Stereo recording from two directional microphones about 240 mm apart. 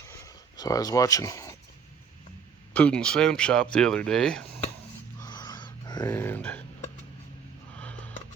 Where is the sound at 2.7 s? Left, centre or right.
Centre.